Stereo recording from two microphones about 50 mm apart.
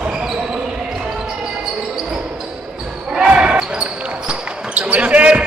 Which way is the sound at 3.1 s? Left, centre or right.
Centre.